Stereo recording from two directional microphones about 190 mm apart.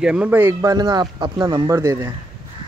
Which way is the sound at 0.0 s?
5° right (ahead or behind).